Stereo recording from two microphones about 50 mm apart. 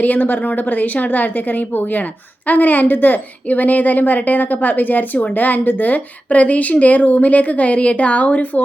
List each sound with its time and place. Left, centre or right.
0.0 s speech: left